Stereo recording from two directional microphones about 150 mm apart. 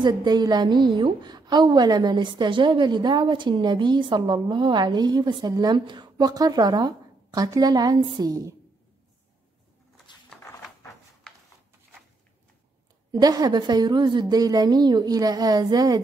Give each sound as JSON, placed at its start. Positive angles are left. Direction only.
{"t": 0.0, "sound": "a woman's voice", "side_deg": -25}
{"t": 13.1, "sound": "a woman's voice", "side_deg": -25}